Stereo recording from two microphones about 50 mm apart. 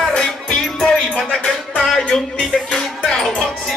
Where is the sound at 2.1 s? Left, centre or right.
Left.